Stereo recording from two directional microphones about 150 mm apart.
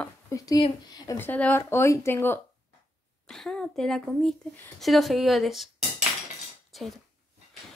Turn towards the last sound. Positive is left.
turn(degrees=0)  # may be behind; listen again after turning